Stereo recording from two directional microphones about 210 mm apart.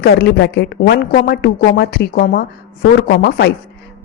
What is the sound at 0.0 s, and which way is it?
Speech, 50° left (ahead or behind).